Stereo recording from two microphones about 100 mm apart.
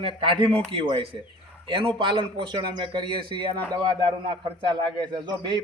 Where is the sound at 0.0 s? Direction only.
60° right (ahead or behind).